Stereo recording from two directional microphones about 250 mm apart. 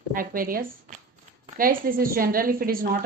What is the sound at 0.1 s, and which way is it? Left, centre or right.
A woman's voice, right.